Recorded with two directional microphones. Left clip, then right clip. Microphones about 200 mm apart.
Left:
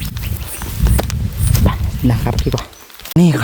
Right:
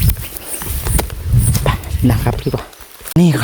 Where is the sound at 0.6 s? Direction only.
10° right (ahead or behind).